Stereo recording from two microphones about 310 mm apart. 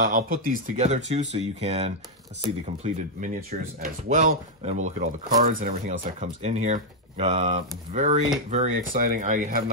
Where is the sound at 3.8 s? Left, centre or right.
Right.